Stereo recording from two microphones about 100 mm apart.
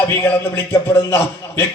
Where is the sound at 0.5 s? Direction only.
25° left (ahead or behind).